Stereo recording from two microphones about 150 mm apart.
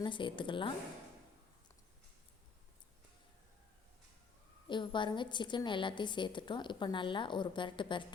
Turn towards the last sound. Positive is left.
turn(degrees=35)  # may be behind; listen again after turning